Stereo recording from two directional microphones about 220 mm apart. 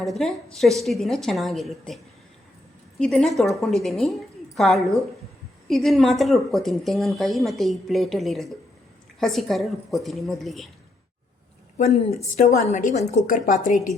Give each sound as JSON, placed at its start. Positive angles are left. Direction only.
{"t": 0.0, "sound": "speech", "side_deg": 0}
{"t": 3.0, "sound": "speech", "side_deg": 5}
{"t": 12.4, "sound": "a woman's voice", "side_deg": 30}